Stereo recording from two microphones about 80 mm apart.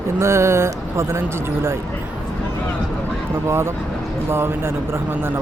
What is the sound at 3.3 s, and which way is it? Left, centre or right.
Speech, right.